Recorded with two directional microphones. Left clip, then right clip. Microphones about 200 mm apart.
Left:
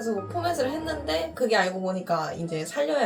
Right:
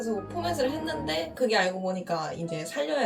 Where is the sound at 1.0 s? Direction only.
5° right (ahead or behind).